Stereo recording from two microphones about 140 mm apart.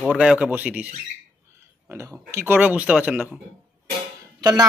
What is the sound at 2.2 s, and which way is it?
Speech, 15° right (ahead or behind).